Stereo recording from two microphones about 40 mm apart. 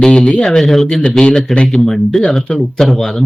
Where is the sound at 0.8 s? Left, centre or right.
Centre.